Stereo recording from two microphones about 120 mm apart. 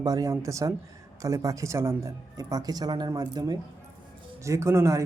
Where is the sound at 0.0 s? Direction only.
30° right (ahead or behind).